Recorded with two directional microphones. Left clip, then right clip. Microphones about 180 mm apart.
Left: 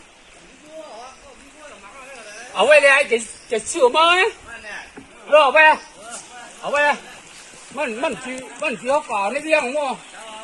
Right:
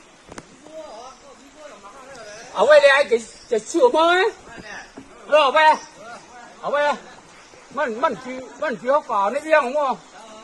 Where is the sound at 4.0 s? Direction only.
45° right (ahead or behind).